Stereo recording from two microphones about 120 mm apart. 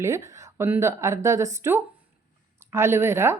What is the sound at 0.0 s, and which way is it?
Speech, 25° right (ahead or behind).